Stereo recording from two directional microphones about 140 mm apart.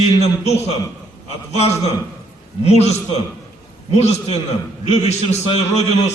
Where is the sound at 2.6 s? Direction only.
50° left (ahead or behind).